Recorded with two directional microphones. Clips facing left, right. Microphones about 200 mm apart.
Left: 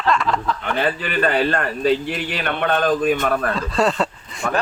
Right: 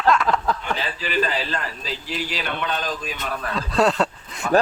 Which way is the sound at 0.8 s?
55° left (ahead or behind).